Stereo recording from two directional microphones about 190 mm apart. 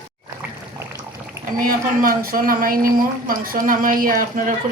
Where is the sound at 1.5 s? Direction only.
45° right (ahead or behind).